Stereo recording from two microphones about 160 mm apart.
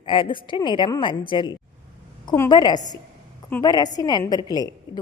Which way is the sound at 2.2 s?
15° left (ahead or behind).